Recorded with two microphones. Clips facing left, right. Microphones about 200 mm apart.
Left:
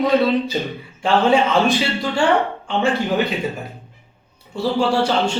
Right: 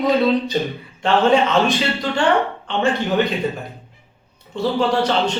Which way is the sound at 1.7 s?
Centre (ahead or behind).